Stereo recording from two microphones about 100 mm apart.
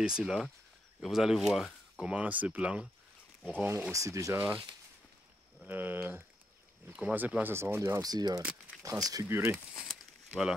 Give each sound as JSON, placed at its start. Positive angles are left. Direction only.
{"t": 0.0, "sound": "speech", "side_deg": -5}
{"t": 3.9, "sound": "speech", "side_deg": -35}
{"t": 5.7, "sound": "speech", "side_deg": -20}
{"t": 9.8, "sound": "a sound", "side_deg": -5}